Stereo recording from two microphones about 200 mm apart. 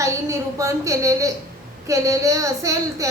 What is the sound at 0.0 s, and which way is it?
A woman's voice, 15° right (ahead or behind).